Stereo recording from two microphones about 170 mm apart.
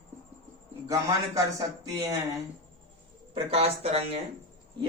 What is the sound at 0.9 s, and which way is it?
Speech, 20° right (ahead or behind).